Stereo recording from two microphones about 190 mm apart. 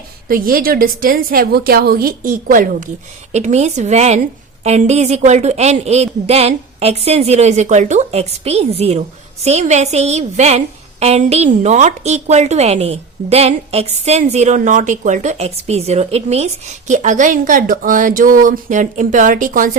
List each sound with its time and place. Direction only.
0.3 s a woman's voice: 50° right (ahead or behind)